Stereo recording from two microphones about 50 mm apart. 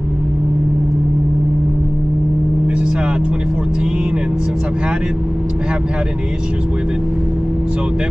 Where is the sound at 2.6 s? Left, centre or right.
Right.